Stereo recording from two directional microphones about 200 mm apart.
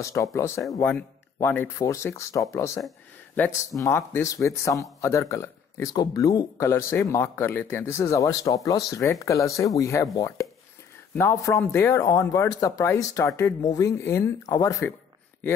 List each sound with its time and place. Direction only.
0.0 s speech: 15° left (ahead or behind)